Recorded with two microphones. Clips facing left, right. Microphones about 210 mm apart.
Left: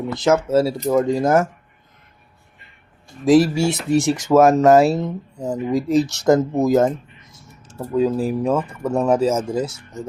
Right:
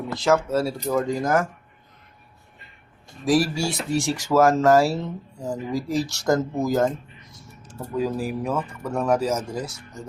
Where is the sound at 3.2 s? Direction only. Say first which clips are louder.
Left 7 dB; 25° left (ahead or behind).